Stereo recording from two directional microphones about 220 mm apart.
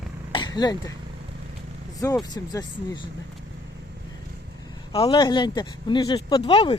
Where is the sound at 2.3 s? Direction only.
20° left (ahead or behind).